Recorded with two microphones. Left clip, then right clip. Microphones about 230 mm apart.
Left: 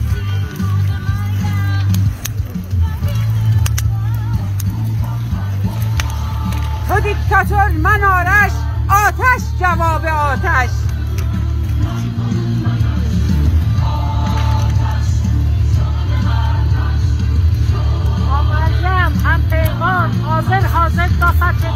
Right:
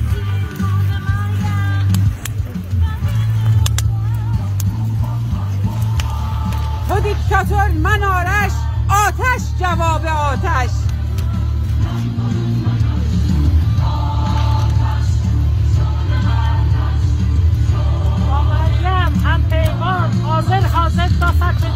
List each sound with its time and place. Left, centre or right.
6.9 s speech: centre
11.8 s music: left
13.7 s music: left
16.2 s music: left
18.9 s speech: centre